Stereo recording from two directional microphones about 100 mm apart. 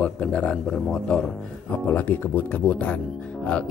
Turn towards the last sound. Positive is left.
turn(degrees=10)  # may be behind; listen again after turning